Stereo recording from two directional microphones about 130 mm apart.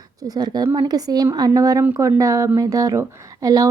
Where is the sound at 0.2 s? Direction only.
30° right (ahead or behind).